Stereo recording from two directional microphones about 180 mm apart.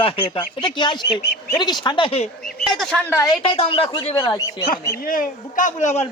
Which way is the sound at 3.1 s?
20° left (ahead or behind).